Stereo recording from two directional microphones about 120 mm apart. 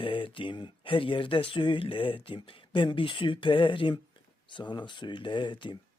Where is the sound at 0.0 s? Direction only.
45° left (ahead or behind).